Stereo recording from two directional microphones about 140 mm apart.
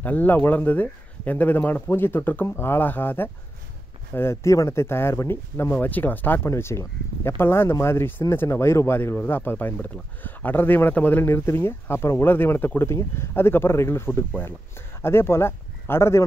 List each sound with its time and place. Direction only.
0.0 s speech: 10° left (ahead or behind)